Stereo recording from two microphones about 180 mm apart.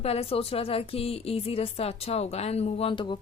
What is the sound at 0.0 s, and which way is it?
Speech, 35° left (ahead or behind).